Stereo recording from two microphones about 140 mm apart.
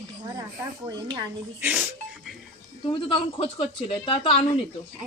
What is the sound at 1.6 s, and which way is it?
Speech, 10° right (ahead or behind).